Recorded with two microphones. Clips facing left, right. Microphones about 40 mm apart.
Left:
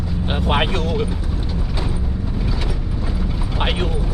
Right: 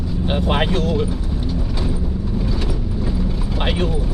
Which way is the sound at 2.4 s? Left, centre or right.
Centre.